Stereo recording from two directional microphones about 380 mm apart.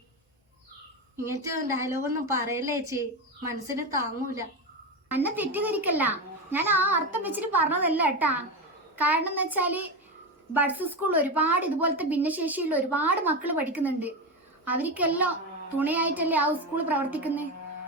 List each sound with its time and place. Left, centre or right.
1.1 s a woman's voice: centre
5.0 s a woman's voice: centre